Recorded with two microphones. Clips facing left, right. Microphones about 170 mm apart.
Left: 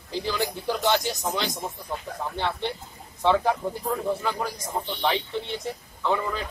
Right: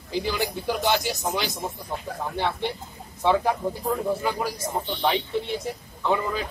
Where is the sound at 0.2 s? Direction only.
5° right (ahead or behind).